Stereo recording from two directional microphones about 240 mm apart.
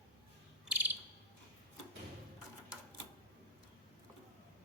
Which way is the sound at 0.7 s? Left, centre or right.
Centre.